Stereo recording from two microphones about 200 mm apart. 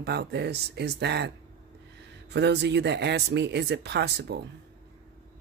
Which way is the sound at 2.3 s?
60° right (ahead or behind).